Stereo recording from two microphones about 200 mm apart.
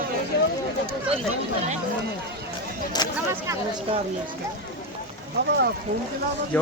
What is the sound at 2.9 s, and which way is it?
Speech, 20° left (ahead or behind).